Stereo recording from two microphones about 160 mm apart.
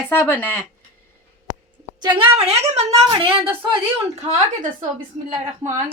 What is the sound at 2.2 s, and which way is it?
A woman's voice, 40° right (ahead or behind).